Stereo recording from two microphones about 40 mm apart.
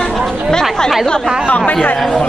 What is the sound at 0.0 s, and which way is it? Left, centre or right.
Chatter, centre.